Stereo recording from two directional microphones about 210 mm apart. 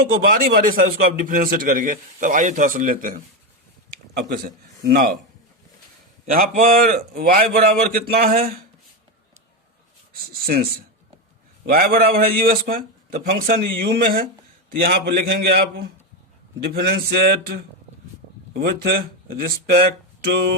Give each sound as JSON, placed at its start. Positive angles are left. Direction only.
{"t": 0.0, "sound": "a man's voice", "side_deg": -45}
{"t": 4.3, "sound": "a man's voice", "side_deg": -45}
{"t": 6.3, "sound": "a man's voice", "side_deg": -40}
{"t": 10.4, "sound": "a man's voice", "side_deg": -45}
{"t": 19.7, "sound": "a sound", "side_deg": -50}